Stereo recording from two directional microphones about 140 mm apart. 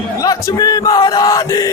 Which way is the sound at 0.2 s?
25° left (ahead or behind).